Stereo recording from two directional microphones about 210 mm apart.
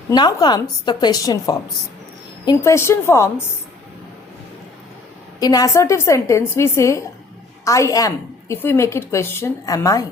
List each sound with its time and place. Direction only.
0.1 s a woman's voice: 20° left (ahead or behind)
5.4 s a woman's voice: 20° left (ahead or behind)